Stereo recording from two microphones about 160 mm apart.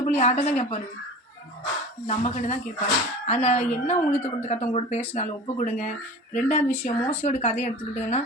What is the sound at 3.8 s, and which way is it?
Speech, 45° left (ahead or behind).